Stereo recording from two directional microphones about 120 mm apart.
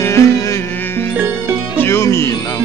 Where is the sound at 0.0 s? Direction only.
25° left (ahead or behind).